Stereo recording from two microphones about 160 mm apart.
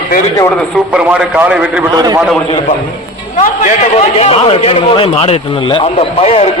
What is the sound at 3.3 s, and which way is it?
A man's voice, 55° left (ahead or behind).